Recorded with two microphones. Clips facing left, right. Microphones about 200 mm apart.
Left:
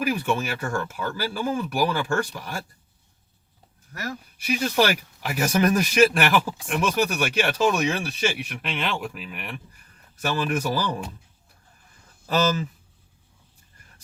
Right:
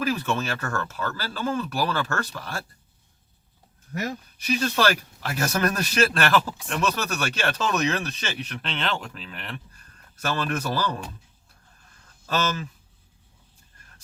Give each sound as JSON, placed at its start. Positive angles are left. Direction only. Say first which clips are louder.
{"t": 0.0, "sound": "speech", "louder": "left 1 dB", "side_deg": 15}
{"t": 3.9, "sound": "speech", "louder": "right 3 dB", "side_deg": -20}
{"t": 4.4, "sound": "speech", "louder": "left 2 dB", "side_deg": 10}
{"t": 12.2, "sound": "speech", "louder": "left 4 dB", "side_deg": 15}